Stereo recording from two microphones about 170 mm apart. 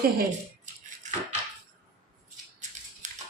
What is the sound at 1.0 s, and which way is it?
Dishes, 45° right (ahead or behind).